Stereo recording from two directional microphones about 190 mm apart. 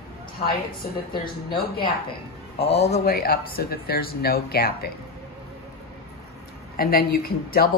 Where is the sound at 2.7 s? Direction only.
35° left (ahead or behind).